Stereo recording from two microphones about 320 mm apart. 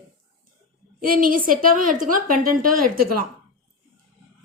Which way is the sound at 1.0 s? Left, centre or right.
Right.